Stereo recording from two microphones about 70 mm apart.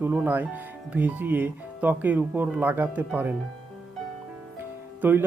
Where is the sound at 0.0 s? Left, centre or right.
Right.